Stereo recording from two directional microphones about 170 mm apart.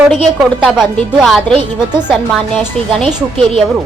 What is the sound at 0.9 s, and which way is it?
Speech, 5° left (ahead or behind).